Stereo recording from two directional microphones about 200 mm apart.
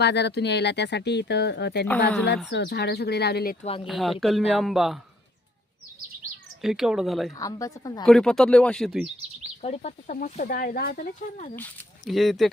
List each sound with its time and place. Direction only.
0.0 s speech: 55° left (ahead or behind)
3.8 s speech: centre (ahead or behind)
6.6 s speech: centre (ahead or behind)
7.3 s a woman's voice: 15° left (ahead or behind)
8.0 s speech: 5° left (ahead or behind)
9.6 s speech: 35° left (ahead or behind)
12.0 s speech: centre (ahead or behind)